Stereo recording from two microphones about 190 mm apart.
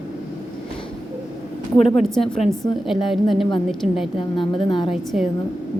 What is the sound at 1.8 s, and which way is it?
Speech, 35° left (ahead or behind).